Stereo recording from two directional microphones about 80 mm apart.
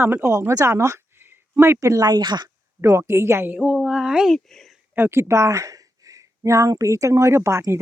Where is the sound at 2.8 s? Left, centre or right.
Right.